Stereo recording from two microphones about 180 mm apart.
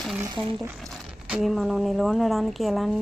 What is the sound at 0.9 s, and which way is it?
Speech, centre (ahead or behind).